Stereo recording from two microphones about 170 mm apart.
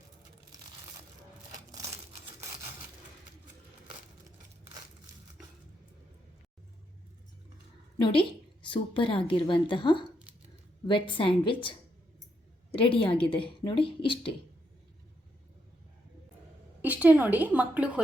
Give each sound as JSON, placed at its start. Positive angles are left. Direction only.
{"t": 7.9, "sound": "a woman's voice", "side_deg": 30}
{"t": 16.8, "sound": "a woman's voice", "side_deg": -10}